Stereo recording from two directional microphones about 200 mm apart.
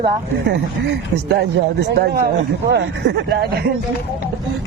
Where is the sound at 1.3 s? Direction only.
55° right (ahead or behind).